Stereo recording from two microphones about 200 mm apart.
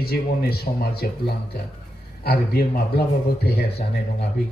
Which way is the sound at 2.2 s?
50° left (ahead or behind).